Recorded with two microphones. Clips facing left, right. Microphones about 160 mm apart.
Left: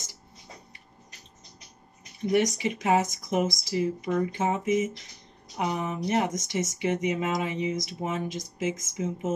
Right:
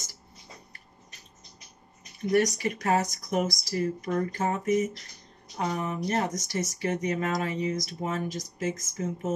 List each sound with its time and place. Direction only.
2.3 s speech: 20° left (ahead or behind)
4.1 s speech: 10° left (ahead or behind)